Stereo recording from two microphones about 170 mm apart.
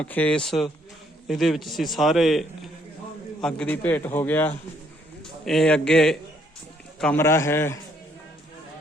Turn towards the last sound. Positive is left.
turn(degrees=15)  # may be behind; listen again after turning